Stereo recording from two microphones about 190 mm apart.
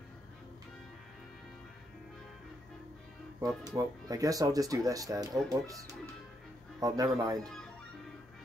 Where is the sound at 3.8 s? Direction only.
20° right (ahead or behind).